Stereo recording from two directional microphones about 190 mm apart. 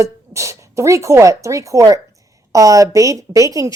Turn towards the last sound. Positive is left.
turn(degrees=-15)  # may be behind; listen again after turning